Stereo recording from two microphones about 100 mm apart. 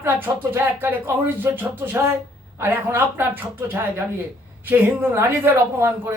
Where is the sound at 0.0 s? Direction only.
20° right (ahead or behind).